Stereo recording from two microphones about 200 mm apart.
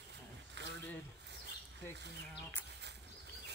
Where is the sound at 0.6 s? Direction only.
60° right (ahead or behind).